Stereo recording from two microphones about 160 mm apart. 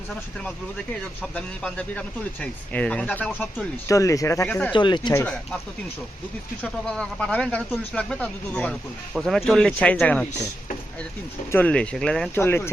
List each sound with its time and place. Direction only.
1.2 s speech: 5° left (ahead or behind)
3.8 s speech: 20° left (ahead or behind)
4.7 s speech: 30° left (ahead or behind)
5.2 s speech: 5° left (ahead or behind)
6.6 s speech: 5° left (ahead or behind)
11.5 s speech: 5° left (ahead or behind)
12.3 s speech: 15° left (ahead or behind)